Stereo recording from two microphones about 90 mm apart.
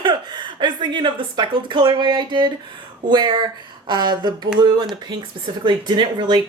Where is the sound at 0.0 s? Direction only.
60° right (ahead or behind).